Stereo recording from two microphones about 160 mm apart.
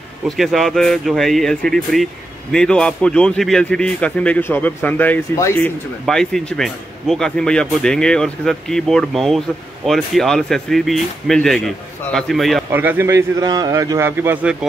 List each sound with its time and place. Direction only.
0.4 s a man's voice: centre (ahead or behind)
6.0 s speech: 5° left (ahead or behind)
12.7 s a man's voice: 15° right (ahead or behind)